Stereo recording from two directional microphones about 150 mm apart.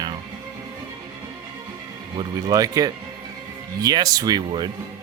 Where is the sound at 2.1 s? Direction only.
25° right (ahead or behind).